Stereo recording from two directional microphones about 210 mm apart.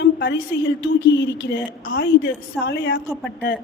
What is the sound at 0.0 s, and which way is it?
Speech, 60° left (ahead or behind).